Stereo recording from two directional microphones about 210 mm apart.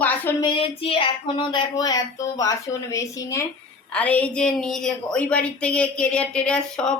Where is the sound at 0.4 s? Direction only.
25° left (ahead or behind).